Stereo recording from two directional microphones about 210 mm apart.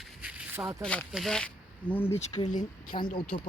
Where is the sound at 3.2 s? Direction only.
25° left (ahead or behind).